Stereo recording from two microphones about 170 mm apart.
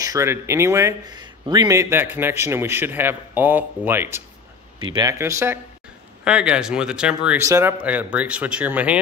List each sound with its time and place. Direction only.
0.0 s speech: 20° right (ahead or behind)
4.7 s speech: 30° right (ahead or behind)
5.2 s speech: 15° right (ahead or behind)